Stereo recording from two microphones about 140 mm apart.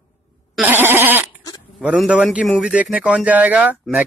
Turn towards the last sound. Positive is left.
turn(degrees=-10)  # may be behind; listen again after turning